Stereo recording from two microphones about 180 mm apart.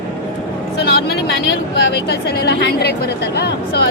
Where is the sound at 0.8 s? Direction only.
65° left (ahead or behind).